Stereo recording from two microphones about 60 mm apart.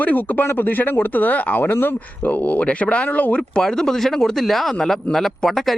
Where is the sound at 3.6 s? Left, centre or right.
Centre.